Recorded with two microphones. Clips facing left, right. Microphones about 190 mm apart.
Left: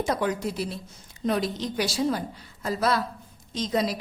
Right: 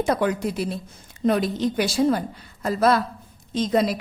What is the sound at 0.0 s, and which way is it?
A woman's voice, 60° right (ahead or behind).